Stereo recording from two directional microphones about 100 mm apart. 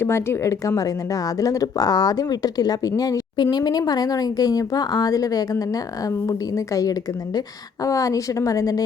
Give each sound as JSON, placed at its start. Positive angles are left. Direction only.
{"t": 0.0, "sound": "speech", "side_deg": 25}